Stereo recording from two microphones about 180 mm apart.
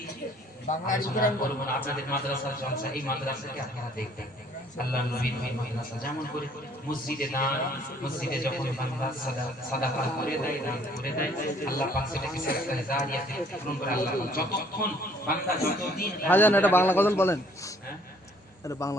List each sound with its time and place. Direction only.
0.9 s a man's voice: 50° left (ahead or behind)
4.8 s speech: 55° left (ahead or behind)
7.1 s a man's voice: 55° left (ahead or behind)
9.8 s a man's voice: 55° left (ahead or behind)
16.2 s a man's voice: 10° left (ahead or behind)